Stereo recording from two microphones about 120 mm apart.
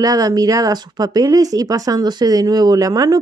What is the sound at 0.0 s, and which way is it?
Speech, 30° right (ahead or behind).